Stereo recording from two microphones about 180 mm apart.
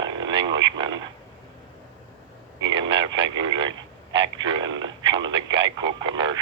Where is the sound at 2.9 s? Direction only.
25° right (ahead or behind).